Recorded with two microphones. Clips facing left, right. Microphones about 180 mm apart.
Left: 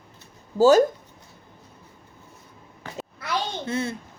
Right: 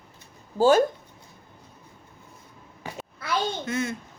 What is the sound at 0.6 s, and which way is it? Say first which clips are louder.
Speech: left 3 dB; 40° left (ahead or behind).